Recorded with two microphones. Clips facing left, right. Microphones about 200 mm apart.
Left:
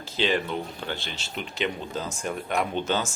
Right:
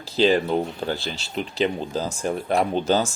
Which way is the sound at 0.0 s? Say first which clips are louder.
Right 7 dB; 35° right (ahead or behind).